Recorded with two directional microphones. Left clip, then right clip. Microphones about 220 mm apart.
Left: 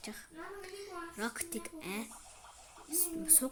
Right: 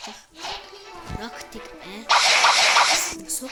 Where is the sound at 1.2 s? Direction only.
5° left (ahead or behind).